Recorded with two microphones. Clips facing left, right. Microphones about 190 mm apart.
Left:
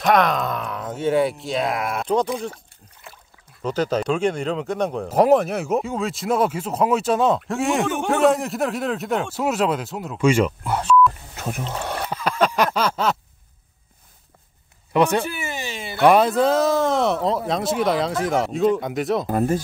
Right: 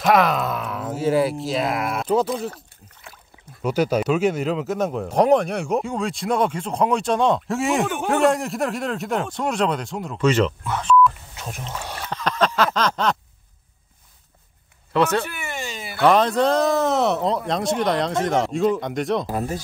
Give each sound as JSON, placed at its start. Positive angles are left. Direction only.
{"t": 0.0, "sound": "speech", "side_deg": -5}
{"t": 3.6, "sound": "speech", "side_deg": -10}
{"t": 10.6, "sound": "speech", "side_deg": 35}
{"t": 11.3, "sound": "rowboat", "side_deg": 55}
{"t": 11.8, "sound": "a sound", "side_deg": 60}
{"t": 12.1, "sound": "a sound", "side_deg": 10}
{"t": 14.9, "sound": "speech", "side_deg": 15}
{"t": 19.2, "sound": "speech", "side_deg": 50}